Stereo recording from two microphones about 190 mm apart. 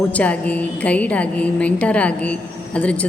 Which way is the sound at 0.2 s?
5° left (ahead or behind).